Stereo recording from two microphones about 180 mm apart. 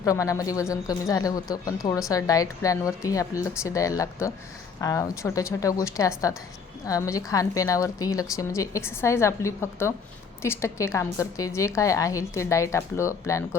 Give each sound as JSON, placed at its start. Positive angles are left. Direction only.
{"t": 0.0, "sound": "a woman's voice", "side_deg": 20}